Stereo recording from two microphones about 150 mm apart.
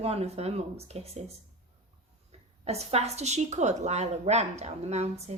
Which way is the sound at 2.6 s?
45° right (ahead or behind).